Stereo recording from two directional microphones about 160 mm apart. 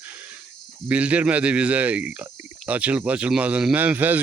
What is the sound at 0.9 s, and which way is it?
A man's voice, 10° right (ahead or behind).